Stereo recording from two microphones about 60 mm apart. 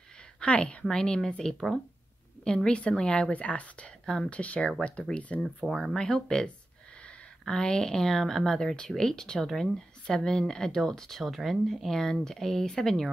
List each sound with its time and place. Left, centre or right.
0.4 s a woman's voice: left
4.0 s speech: centre
4.4 s a woman's voice: left
5.7 s speech: centre
5.9 s speech: centre